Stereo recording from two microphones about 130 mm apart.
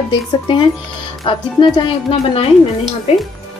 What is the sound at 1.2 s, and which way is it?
Speech, 45° left (ahead or behind).